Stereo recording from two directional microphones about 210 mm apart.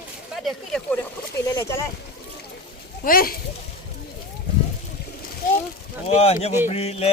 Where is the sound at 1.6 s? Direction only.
15° left (ahead or behind).